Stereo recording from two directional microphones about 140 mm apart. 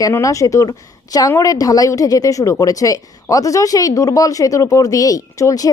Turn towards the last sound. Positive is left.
turn(degrees=25)  # may be behind; listen again after turning